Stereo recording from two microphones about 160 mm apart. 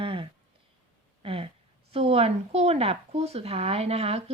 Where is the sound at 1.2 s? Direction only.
35° right (ahead or behind).